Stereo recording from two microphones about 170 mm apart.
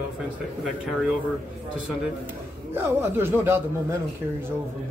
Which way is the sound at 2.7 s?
15° right (ahead or behind).